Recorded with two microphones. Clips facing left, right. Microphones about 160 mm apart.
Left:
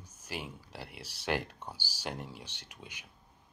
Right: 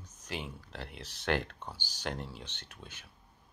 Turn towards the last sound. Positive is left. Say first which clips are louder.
# even
turn(degrees=15)  # may be behind; listen again after turning